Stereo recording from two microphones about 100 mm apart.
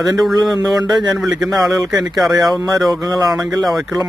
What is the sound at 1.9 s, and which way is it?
Speech, 40° right (ahead or behind).